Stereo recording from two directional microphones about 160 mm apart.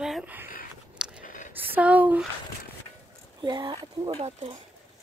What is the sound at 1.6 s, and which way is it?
Speech, 10° right (ahead or behind).